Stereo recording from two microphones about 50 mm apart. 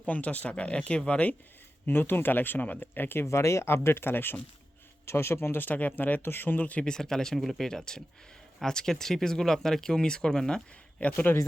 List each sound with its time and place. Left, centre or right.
0.0 s speech: left
1.9 s speech: left
3.2 s speech: left
3.8 s speech: left
5.0 s speech: left
5.5 s speech: left
6.2 s speech: left
6.8 s speech: centre
11.0 s speech: left